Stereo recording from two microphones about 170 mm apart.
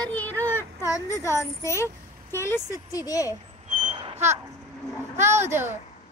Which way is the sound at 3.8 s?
35° right (ahead or behind).